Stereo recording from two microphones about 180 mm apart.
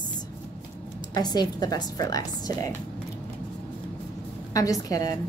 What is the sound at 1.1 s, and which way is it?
A woman's voice, 25° left (ahead or behind).